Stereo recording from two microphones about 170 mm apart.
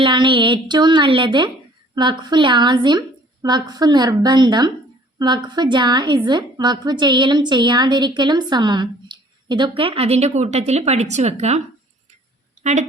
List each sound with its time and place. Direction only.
0.0 s a woman's voice: 30° right (ahead or behind)